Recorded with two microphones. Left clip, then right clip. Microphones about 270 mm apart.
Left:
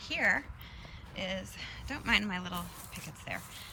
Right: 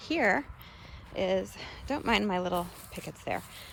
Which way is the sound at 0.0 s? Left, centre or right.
Centre.